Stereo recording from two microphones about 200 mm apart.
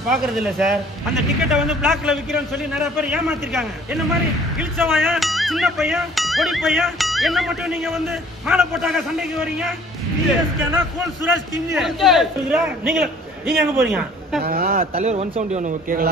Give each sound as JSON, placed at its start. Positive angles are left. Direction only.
{"t": 0.1, "sound": "a man's voice", "side_deg": 0}
{"t": 4.9, "sound": "a man's voice", "side_deg": 0}
{"t": 10.6, "sound": "a man's voice", "side_deg": -10}
{"t": 11.8, "sound": "a man's voice", "side_deg": 0}
{"t": 14.4, "sound": "speech", "side_deg": -50}
{"t": 14.8, "sound": "a man's voice", "side_deg": -30}